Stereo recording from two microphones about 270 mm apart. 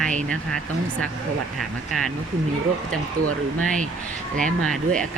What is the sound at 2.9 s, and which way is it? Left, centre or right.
Speech, right.